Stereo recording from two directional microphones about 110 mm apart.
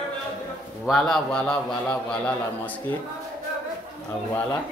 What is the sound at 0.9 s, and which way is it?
Speech, 5° left (ahead or behind).